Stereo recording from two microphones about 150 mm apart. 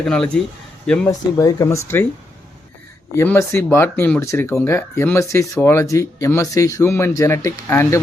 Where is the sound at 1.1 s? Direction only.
20° left (ahead or behind).